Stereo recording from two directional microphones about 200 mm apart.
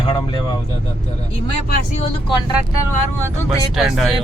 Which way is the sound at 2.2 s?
20° left (ahead or behind).